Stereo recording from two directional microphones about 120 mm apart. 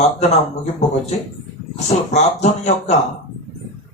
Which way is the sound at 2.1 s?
70° left (ahead or behind).